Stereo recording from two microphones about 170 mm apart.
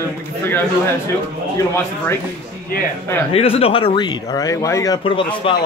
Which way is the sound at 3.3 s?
35° left (ahead or behind).